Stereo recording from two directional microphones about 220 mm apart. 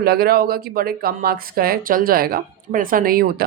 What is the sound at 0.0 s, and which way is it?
Speech, 45° right (ahead or behind).